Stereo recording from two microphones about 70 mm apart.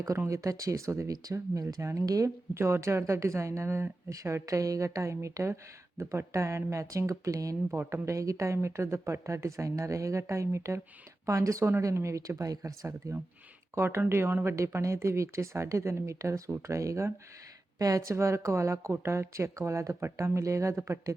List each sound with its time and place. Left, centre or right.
0.3 s speech: right
1.1 s speech: right
2.0 s speech: right
2.6 s speech: right
4.1 s speech: right
7.8 s speech: right
8.0 s speech: right
13.7 s speech: right